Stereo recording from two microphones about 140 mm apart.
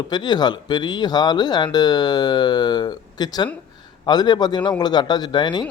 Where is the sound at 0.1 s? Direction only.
30° left (ahead or behind).